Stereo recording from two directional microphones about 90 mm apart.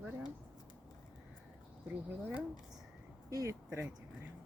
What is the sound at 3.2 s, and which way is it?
Speech, 40° right (ahead or behind).